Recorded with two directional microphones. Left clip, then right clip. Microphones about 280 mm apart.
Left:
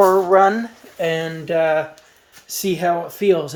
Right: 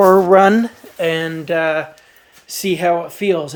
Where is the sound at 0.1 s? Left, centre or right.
Right.